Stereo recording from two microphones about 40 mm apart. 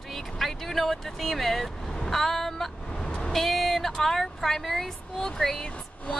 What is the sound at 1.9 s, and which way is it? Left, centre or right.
Vehicle, centre.